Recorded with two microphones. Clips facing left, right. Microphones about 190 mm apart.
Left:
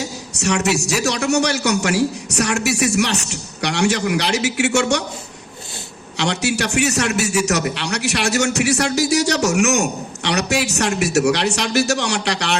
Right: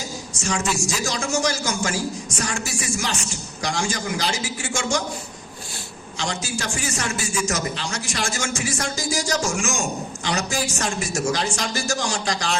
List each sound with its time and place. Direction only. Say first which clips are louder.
0.0 s a man's voice: left 6 dB; 70° left (ahead or behind)
6.1 s a man's voice: left 8 dB; 70° left (ahead or behind)